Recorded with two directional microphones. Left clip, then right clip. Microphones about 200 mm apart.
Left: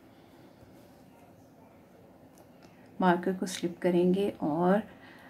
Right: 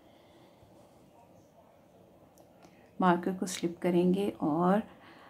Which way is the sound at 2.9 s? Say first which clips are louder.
Left 1 dB; 15° right (ahead or behind).